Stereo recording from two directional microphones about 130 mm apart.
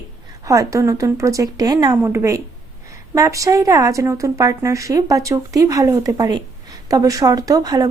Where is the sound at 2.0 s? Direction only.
20° right (ahead or behind).